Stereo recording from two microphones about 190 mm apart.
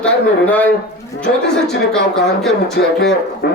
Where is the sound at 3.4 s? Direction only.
60° left (ahead or behind).